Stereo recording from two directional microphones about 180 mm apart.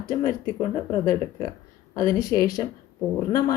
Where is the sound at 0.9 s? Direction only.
20° left (ahead or behind).